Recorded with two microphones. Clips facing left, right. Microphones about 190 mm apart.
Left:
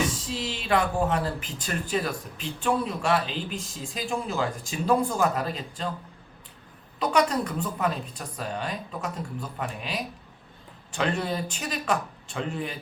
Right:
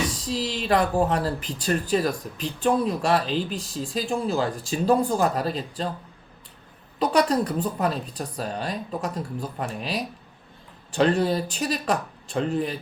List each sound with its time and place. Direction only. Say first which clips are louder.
0.1 s speech: right 4 dB; 35° right (ahead or behind)
7.0 s speech: right 3 dB; 35° right (ahead or behind)